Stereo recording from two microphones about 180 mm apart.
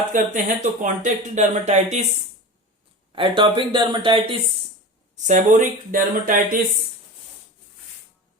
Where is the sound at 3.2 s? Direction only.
25° right (ahead or behind).